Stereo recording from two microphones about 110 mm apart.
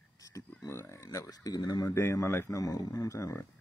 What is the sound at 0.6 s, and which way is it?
Speech, 25° left (ahead or behind).